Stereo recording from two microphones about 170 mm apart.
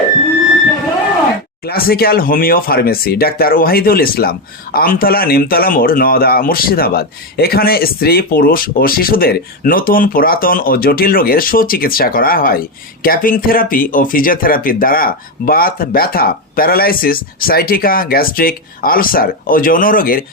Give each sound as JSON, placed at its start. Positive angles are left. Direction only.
{"t": 1.6, "sound": "speech", "side_deg": 65}